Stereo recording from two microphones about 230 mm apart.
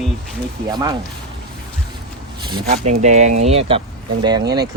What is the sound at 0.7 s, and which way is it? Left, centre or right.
Speech, centre.